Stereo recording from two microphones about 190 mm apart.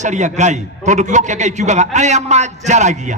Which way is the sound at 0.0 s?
40° right (ahead or behind).